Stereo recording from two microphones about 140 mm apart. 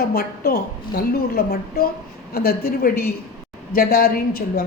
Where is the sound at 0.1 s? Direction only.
90° left.